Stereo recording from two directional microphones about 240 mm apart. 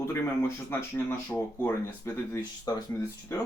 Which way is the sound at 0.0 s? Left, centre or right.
Centre.